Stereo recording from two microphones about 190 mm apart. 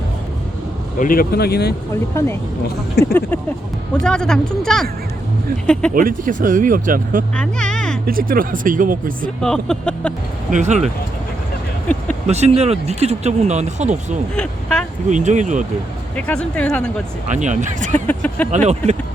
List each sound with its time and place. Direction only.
0.9 s speech: 50° left (ahead or behind)
2.1 s speech: 15° left (ahead or behind)
5.9 s speech: 45° right (ahead or behind)
7.3 s vehicle: 5° left (ahead or behind)
8.0 s speech: 50° right (ahead or behind)
9.4 s speech: 5° left (ahead or behind)
10.5 s speech: 40° right (ahead or behind)
12.3 s speech: 35° right (ahead or behind)
14.3 s speech: 5° left (ahead or behind)
15.1 s speech: 40° right (ahead or behind)
16.1 s speech: 5° left (ahead or behind)
17.2 s speech: 40° right (ahead or behind)
17.9 s speech: 10° left (ahead or behind)
18.5 s speech: 35° right (ahead or behind)